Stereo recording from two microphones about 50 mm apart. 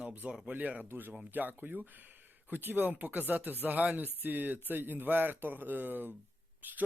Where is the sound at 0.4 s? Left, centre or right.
Right.